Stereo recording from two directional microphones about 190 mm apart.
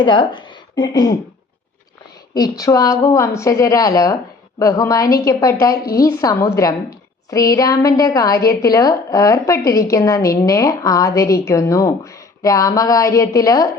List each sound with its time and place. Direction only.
0.0 s speech: 25° left (ahead or behind)
2.3 s a woman's voice: 20° left (ahead or behind)